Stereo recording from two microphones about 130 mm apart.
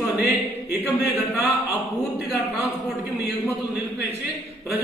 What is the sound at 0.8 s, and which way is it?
Speech, 15° right (ahead or behind).